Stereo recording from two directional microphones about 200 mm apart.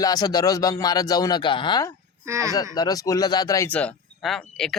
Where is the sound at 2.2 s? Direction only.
15° right (ahead or behind).